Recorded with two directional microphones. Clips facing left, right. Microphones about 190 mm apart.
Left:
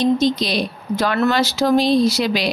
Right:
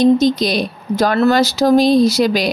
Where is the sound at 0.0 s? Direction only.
45° right (ahead or behind).